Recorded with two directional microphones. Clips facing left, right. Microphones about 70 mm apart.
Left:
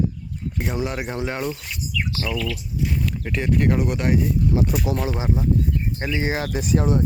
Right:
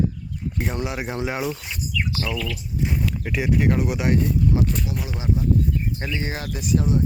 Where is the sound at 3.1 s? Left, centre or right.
Centre.